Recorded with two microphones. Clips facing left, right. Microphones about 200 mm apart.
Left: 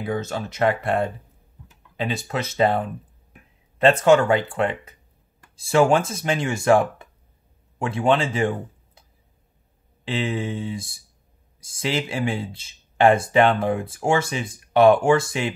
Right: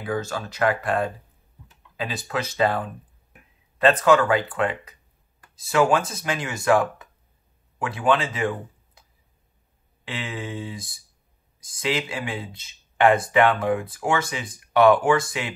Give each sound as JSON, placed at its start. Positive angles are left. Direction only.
{"t": 0.0, "sound": "speech", "side_deg": 25}
{"t": 10.0, "sound": "speech", "side_deg": 25}